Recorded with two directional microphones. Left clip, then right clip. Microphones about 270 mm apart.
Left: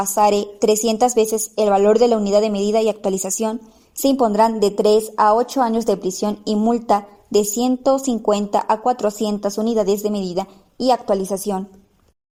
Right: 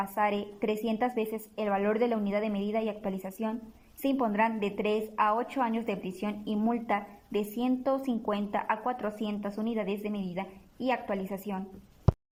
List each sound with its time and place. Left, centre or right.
0.0 s a woman's voice: left